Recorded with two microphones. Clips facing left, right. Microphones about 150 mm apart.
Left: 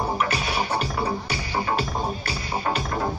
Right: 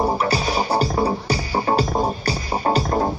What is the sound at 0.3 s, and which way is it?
Music, 35° right (ahead or behind).